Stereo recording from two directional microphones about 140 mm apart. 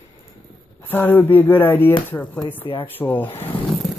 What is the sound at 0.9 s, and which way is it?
Speech, 15° left (ahead or behind).